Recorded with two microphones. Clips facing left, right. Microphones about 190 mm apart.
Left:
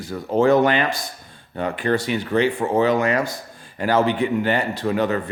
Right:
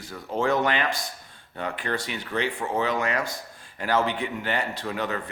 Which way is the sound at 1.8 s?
40° left (ahead or behind).